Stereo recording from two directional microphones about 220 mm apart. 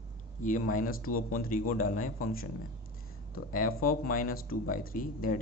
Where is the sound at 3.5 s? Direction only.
40° left (ahead or behind).